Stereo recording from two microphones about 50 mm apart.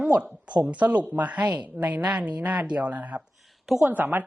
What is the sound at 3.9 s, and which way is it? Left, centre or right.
Speech, right.